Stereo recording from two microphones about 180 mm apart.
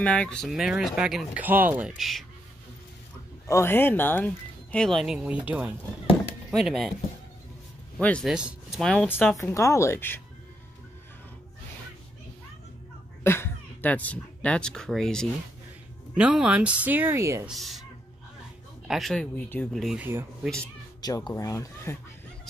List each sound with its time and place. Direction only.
0.0 s speech: 5° left (ahead or behind)
3.4 s speech: 15° left (ahead or behind)
8.0 s speech: 5° left (ahead or behind)
9.4 s speech: 15° left (ahead or behind)
13.2 s speech: 15° left (ahead or behind); by 17.5 s 15° right (ahead or behind)
17.5 s speech: centre (ahead or behind)
18.9 s speech: centre (ahead or behind)
21.3 s speech: 20° left (ahead or behind)